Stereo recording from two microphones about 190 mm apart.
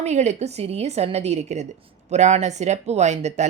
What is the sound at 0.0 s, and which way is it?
Speech, 35° right (ahead or behind).